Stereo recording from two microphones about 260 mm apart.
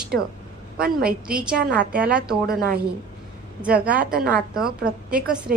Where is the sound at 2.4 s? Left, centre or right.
Right.